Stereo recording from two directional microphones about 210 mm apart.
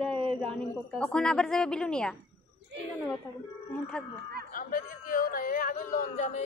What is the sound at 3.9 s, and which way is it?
Speech, 5° left (ahead or behind).